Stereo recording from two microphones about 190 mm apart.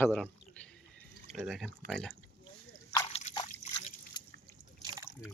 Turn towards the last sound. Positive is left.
turn(degrees=20)  # may be behind; listen again after turning